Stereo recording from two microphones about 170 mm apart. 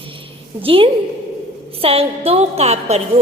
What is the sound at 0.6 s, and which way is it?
A woman's voice, 30° right (ahead or behind).